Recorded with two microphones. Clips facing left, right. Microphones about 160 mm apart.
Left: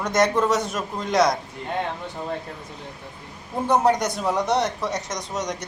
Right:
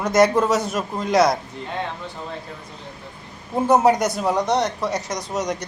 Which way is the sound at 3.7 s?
5° right (ahead or behind).